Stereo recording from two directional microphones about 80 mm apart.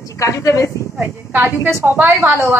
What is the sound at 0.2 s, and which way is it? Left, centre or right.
Speech, left.